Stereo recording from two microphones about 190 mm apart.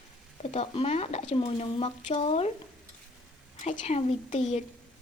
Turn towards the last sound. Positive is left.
turn(degrees=35)  # may be behind; listen again after turning